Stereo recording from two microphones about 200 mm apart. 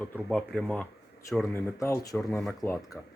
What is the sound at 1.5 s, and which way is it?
Speech, 15° left (ahead or behind).